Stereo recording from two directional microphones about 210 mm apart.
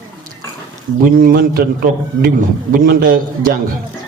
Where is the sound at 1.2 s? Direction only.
45° right (ahead or behind).